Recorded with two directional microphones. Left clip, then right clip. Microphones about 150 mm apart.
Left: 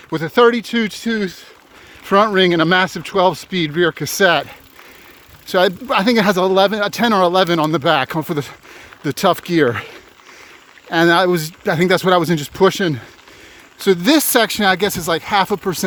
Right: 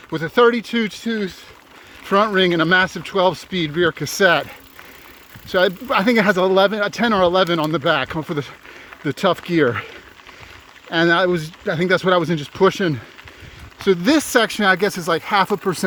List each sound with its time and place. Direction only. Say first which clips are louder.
0.1 s speech: left 2 dB; 50° left (ahead or behind)
0.9 s speech: left 3 dB; 60° left (ahead or behind)
2.0 s speech: left 3 dB; 45° left (ahead or behind); by 15.8 s 20° left (ahead or behind)